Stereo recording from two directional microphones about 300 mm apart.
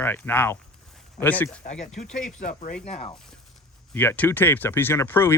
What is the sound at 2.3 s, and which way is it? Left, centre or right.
Speech, left.